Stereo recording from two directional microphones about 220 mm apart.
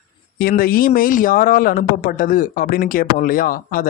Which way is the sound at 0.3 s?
40° left (ahead or behind).